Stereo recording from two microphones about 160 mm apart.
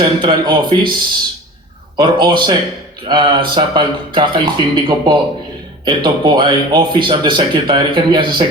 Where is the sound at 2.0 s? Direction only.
30° right (ahead or behind).